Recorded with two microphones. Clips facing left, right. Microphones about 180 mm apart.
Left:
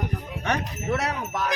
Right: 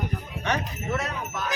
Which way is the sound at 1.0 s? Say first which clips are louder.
Left 3 dB; 75° left (ahead or behind).